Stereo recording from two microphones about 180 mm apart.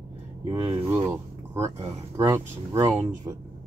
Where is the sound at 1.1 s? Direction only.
15° right (ahead or behind).